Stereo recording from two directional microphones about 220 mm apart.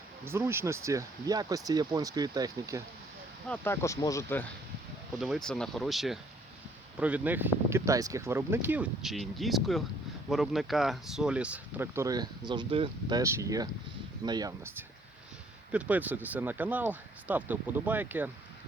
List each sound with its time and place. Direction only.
0.3 s speech: 10° right (ahead or behind)
3.5 s speech: 10° left (ahead or behind)
5.1 s speech: centre (ahead or behind)